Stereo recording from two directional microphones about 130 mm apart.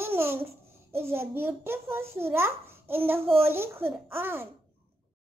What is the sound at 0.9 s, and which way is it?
A child's voice, 20° right (ahead or behind).